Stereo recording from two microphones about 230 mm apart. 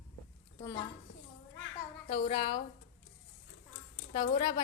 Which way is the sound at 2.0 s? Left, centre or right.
Left.